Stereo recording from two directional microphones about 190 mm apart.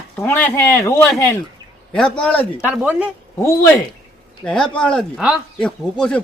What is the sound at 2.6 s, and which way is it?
Speech, 5° right (ahead or behind).